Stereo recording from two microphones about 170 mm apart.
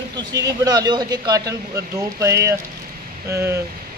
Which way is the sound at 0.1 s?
25° right (ahead or behind).